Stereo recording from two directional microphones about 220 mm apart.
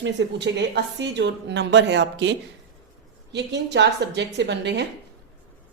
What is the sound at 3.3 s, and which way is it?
A woman's voice, 50° right (ahead or behind).